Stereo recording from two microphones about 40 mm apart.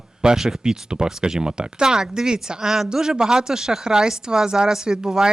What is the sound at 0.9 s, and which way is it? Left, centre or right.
Speech, centre.